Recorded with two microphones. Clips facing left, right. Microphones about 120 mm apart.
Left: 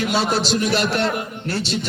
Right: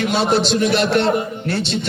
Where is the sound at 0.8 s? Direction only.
35° right (ahead or behind).